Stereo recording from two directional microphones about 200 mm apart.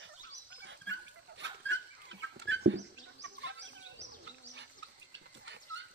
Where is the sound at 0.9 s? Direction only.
65° right (ahead or behind).